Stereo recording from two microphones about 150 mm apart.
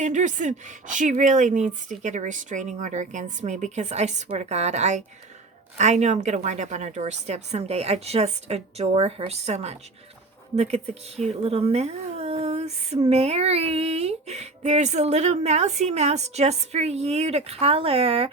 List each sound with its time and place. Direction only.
0.0 s a woman's voice: 55° right (ahead or behind); by 18.3 s 40° right (ahead or behind)